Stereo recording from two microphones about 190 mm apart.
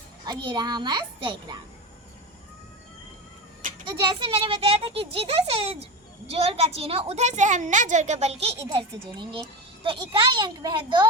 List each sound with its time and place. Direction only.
0.3 s a child's voice: 20° right (ahead or behind)
3.8 s a child's voice: 25° right (ahead or behind)